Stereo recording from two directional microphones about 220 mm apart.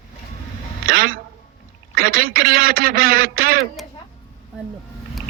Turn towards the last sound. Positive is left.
turn(degrees=-40)  # may be behind; listen again after turning